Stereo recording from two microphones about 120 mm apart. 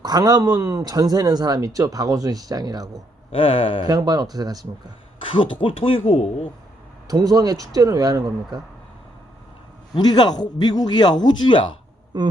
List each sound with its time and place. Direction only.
0.0 s speech: 35° right (ahead or behind)
3.3 s speech: 50° left (ahead or behind)
3.8 s speech: 35° right (ahead or behind)
5.2 s speech: 45° left (ahead or behind)
7.1 s speech: 30° right (ahead or behind)
9.9 s speech: 35° left (ahead or behind)
12.1 s speech: 35° right (ahead or behind)